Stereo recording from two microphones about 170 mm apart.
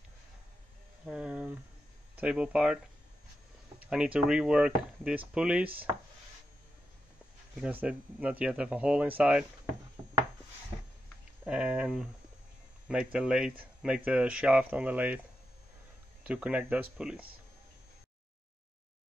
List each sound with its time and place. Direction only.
1.0 s a sound: 5° right (ahead or behind)
2.1 s speech: 5° right (ahead or behind)
3.8 s speech: 5° right (ahead or behind)
7.6 s speech: 5° right (ahead or behind)
11.4 s speech: 5° right (ahead or behind)
16.3 s speech: 10° right (ahead or behind)